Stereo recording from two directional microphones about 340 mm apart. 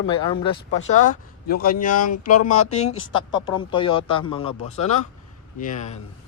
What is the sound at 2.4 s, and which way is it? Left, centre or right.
Speech, left.